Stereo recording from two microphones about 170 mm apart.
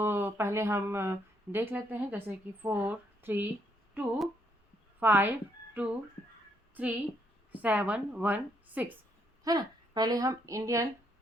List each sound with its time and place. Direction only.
0.0 s speech: 15° right (ahead or behind)
4.9 s a woman's voice: 10° right (ahead or behind)
9.4 s speech: 25° right (ahead or behind)